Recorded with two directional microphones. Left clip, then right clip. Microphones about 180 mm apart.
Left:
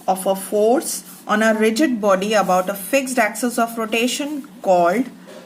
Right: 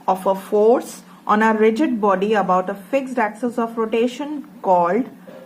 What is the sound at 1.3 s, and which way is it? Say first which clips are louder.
A woman's voice: right 1 dB; 35° right (ahead or behind).